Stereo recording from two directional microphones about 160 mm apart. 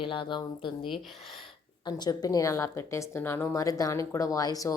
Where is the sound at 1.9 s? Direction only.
25° left (ahead or behind).